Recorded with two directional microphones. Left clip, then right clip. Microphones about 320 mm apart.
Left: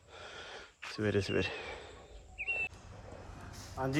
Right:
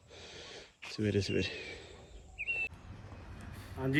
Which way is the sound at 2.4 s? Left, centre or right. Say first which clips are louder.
Even; centre.